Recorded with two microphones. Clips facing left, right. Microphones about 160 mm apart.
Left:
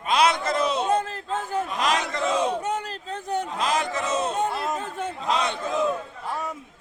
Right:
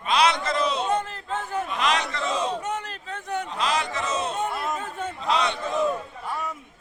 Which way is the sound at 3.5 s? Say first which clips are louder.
Right 1 dB; 45° left (ahead or behind).